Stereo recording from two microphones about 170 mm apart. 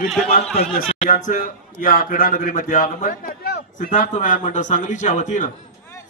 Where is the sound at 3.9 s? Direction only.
50° left (ahead or behind).